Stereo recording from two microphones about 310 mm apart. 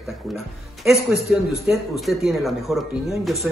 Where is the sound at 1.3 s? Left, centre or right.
Centre.